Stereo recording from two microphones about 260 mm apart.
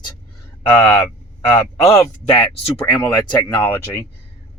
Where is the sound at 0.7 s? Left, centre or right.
Centre.